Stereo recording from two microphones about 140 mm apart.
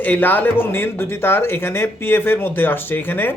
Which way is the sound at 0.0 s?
15° left (ahead or behind).